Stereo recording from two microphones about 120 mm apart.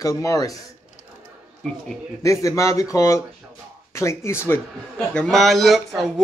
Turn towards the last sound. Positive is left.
turn(degrees=0)  # may be behind; listen again after turning